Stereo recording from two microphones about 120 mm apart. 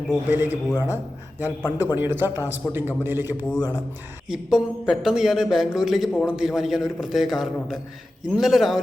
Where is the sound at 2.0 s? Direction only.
20° right (ahead or behind).